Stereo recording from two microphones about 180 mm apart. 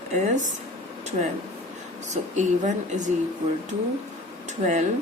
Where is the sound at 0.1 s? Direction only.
40° right (ahead or behind).